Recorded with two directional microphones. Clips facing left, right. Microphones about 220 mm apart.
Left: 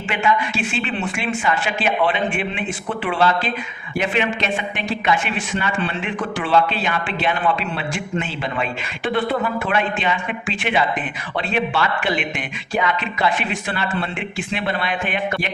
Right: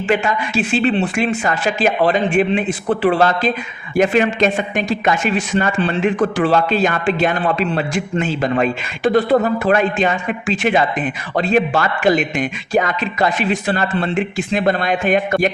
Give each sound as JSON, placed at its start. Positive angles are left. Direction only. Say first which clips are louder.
{"t": 0.1, "sound": "speech", "louder": "right 3 dB", "side_deg": -40}